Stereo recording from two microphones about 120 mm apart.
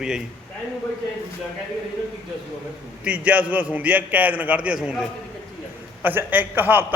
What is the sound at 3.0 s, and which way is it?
A man's voice, 10° right (ahead or behind).